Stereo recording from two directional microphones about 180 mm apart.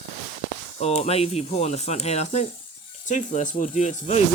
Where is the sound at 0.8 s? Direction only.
35° left (ahead or behind).